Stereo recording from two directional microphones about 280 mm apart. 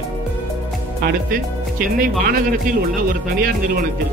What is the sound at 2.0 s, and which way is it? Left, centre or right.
Speech, right.